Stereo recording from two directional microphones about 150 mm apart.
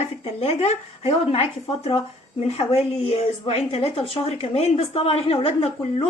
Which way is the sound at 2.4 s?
45° left (ahead or behind).